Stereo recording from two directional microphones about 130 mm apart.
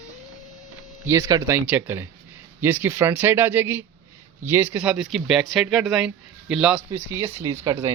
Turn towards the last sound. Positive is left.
turn(degrees=-20)  # may be behind; listen again after turning